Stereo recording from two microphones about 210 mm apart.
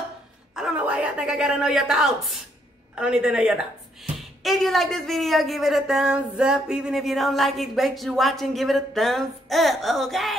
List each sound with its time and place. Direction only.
0.6 s a woman's voice: 5° right (ahead or behind)